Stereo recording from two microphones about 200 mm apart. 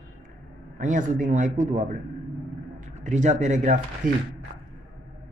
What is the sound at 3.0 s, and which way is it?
Speech, 35° right (ahead or behind).